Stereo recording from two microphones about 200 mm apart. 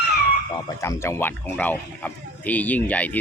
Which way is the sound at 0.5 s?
15° left (ahead or behind).